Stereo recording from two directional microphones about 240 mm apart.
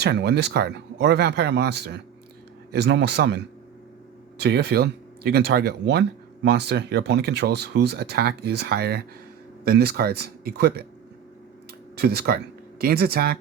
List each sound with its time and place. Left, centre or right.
0.0 s speech: right
11.9 s speech: right